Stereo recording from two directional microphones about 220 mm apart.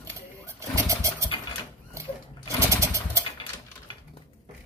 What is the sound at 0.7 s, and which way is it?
Vehicle, 15° right (ahead or behind).